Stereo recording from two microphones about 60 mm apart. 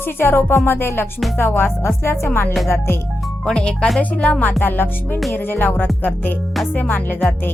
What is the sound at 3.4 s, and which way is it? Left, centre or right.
Speech, centre.